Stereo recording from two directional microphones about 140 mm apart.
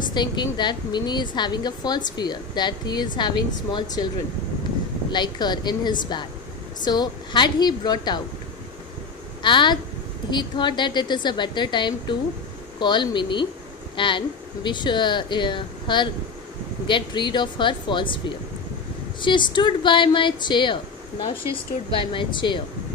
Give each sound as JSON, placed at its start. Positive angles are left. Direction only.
{"t": 0.1, "sound": "a woman's voice", "side_deg": 30}
{"t": 5.1, "sound": "a woman's voice", "side_deg": 30}
{"t": 9.4, "sound": "a woman's voice", "side_deg": 35}
{"t": 19.2, "sound": "a woman's voice", "side_deg": 35}
{"t": 21.9, "sound": "a woman's voice", "side_deg": 35}